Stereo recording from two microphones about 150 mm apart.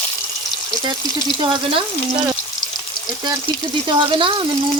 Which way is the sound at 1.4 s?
30° right (ahead or behind).